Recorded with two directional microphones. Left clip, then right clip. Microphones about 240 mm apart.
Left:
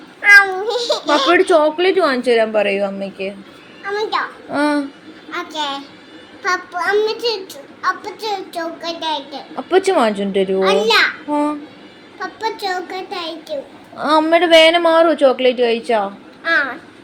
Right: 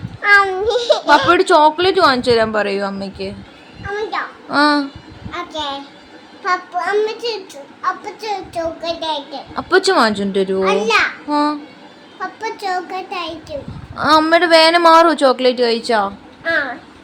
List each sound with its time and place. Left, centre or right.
0.2 s a child's voice: centre
3.9 s a child's voice: centre